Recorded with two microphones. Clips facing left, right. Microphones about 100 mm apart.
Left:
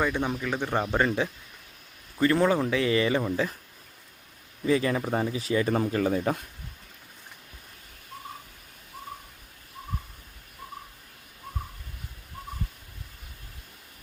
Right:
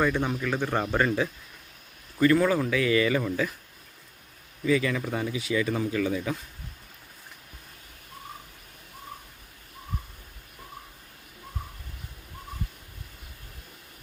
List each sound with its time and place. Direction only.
0.0 s a man's voice: 15° left (ahead or behind)
4.6 s speech: 35° left (ahead or behind)